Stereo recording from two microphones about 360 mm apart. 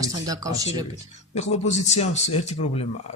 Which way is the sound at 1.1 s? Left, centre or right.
Centre.